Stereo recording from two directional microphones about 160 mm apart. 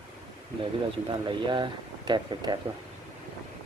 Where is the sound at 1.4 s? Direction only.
30° right (ahead or behind).